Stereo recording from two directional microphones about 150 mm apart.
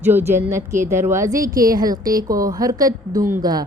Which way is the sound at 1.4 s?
70° right (ahead or behind).